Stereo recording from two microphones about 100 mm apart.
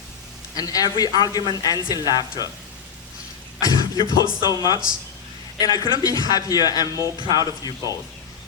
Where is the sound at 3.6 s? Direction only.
40° left (ahead or behind).